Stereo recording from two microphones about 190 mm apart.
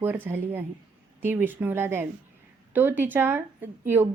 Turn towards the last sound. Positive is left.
turn(degrees=-10)  # may be behind; listen again after turning